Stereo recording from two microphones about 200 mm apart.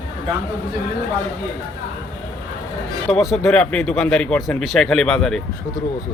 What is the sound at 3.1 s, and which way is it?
Speech, centre (ahead or behind).